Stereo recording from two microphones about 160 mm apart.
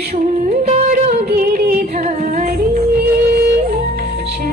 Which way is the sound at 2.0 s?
45° right (ahead or behind).